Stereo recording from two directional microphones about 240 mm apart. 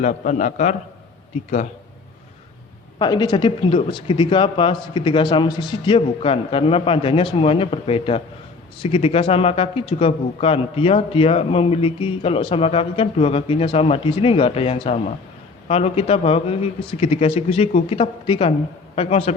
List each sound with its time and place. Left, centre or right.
0.0 s a man's voice: left
3.0 s a man's voice: centre